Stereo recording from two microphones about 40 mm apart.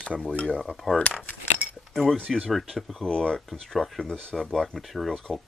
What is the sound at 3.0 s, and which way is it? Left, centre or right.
Speech, left.